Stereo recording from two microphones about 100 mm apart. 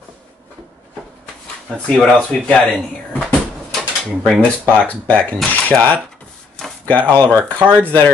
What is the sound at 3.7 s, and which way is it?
Drawer open or close, centre (ahead or behind).